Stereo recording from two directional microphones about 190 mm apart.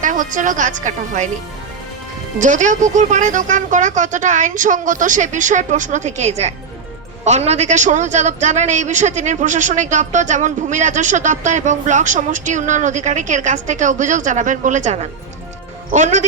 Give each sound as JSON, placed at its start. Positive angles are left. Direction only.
{"t": 0.0, "sound": "speech", "side_deg": -45}
{"t": 2.4, "sound": "a man's voice", "side_deg": -40}